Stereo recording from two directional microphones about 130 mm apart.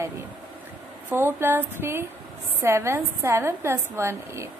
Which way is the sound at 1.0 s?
15° right (ahead or behind).